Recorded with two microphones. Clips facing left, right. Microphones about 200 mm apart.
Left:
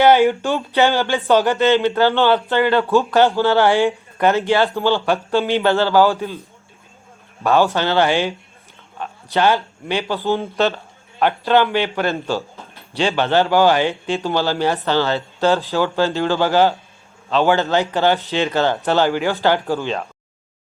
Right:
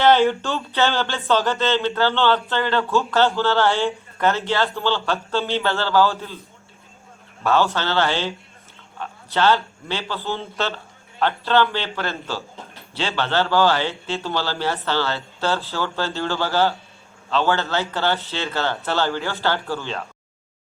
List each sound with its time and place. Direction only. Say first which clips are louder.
0.0 s a man's voice: left 3 dB; 10° left (ahead or behind)
7.4 s a man's voice: left 4 dB; 15° left (ahead or behind)